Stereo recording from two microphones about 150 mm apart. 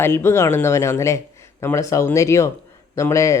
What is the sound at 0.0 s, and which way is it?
Speech, 15° left (ahead or behind).